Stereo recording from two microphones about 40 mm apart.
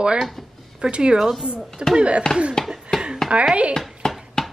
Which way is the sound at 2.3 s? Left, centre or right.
Centre.